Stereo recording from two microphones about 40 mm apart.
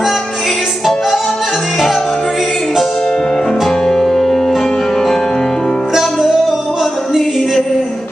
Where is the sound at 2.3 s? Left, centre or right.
Centre.